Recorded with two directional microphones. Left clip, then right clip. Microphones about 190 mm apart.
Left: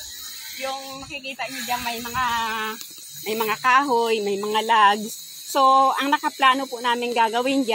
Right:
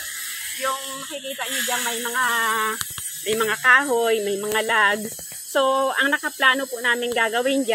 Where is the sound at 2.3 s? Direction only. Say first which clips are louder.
Right 4 dB; 40° left (ahead or behind).